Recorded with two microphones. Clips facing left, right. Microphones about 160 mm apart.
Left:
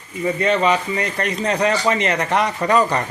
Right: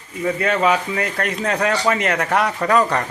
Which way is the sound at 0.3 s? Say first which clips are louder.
Left 1 dB; centre (ahead or behind).